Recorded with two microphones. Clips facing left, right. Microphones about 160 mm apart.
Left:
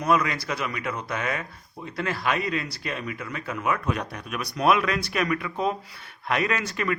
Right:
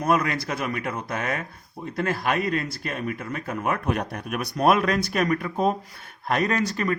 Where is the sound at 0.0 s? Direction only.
50° right (ahead or behind).